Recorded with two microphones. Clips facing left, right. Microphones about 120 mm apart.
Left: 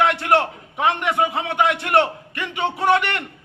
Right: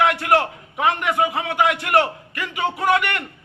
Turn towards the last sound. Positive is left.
turn(degrees=25)  # may be behind; listen again after turning